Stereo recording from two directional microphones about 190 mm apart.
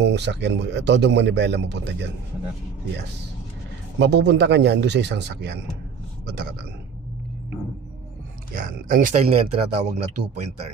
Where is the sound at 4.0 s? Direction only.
65° right (ahead or behind).